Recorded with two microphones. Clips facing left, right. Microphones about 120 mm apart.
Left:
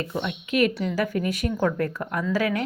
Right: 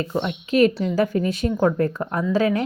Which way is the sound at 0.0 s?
35° right (ahead or behind).